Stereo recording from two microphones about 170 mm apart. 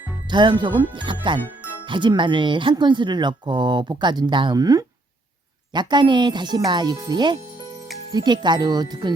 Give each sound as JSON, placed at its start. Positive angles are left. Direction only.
{"t": 0.3, "sound": "speech", "side_deg": -25}